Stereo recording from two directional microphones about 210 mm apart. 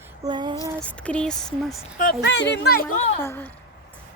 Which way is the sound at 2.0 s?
45° left (ahead or behind).